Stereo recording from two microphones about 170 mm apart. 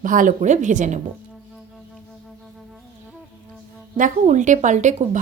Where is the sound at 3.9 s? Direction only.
50° right (ahead or behind).